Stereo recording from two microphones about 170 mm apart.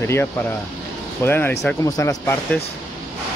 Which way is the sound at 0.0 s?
15° left (ahead or behind).